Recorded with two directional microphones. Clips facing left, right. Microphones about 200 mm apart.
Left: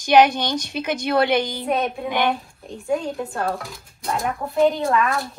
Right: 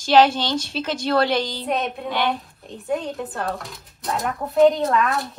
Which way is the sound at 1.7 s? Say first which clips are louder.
Left 3 dB; centre (ahead or behind).